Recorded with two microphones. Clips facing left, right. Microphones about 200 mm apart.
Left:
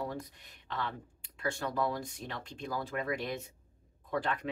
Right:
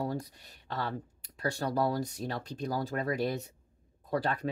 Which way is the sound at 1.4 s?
40° right (ahead or behind).